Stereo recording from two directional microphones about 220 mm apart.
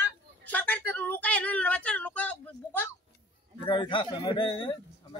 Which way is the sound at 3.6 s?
20° left (ahead or behind).